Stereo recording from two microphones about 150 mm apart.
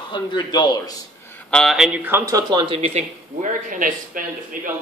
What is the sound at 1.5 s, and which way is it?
Speech, 5° left (ahead or behind).